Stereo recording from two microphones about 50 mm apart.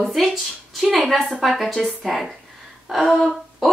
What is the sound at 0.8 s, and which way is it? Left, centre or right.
Speech, centre.